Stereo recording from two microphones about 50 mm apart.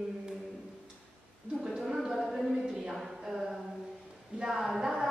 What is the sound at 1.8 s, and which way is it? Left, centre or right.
A woman's voice, centre.